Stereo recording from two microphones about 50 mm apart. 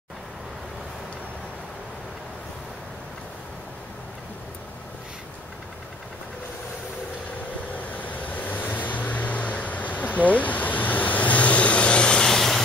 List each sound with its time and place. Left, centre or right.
8.0 s vehicle: left; by 12.6 s centre